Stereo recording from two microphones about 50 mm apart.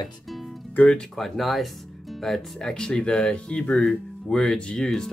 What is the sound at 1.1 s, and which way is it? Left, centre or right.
Speech, centre.